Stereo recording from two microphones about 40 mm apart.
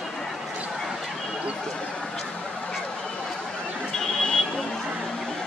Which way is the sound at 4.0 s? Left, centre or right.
Left.